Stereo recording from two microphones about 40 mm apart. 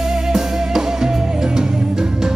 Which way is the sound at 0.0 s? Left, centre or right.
Centre.